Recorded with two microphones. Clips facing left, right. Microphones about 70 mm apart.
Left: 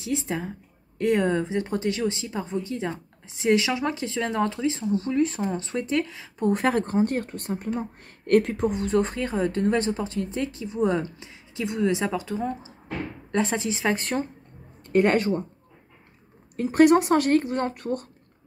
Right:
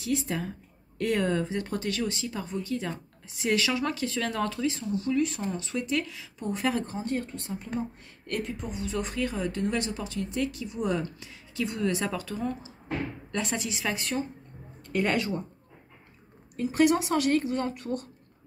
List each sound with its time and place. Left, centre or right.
0.0 s speech: left
6.4 s speech: left
8.3 s speech: left
8.8 s speech: left
16.5 s speech: left